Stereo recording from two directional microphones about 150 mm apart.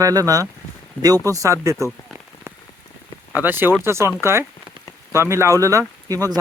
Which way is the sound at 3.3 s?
10° right (ahead or behind).